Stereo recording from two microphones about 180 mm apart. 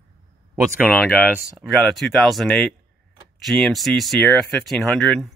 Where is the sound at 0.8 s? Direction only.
10° left (ahead or behind).